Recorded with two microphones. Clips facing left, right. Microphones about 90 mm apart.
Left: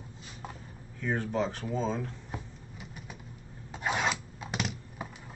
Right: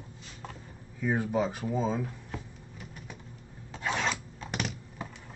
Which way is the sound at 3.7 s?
15° left (ahead or behind).